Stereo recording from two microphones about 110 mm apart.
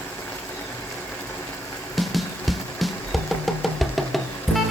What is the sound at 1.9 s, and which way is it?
Music, centre (ahead or behind).